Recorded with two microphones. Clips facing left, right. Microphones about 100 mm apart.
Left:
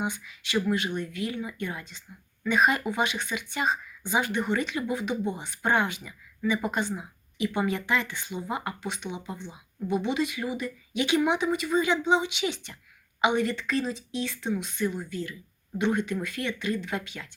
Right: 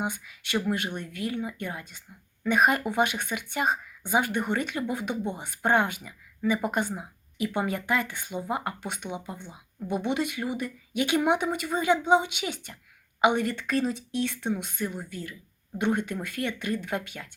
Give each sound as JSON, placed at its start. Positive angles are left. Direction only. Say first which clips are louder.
{"t": 0.0, "sound": "speech", "louder": "even", "side_deg": -50}